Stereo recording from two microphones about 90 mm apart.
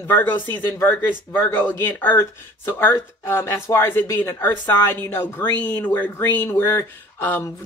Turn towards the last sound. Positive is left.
turn(degrees=25)  # may be behind; listen again after turning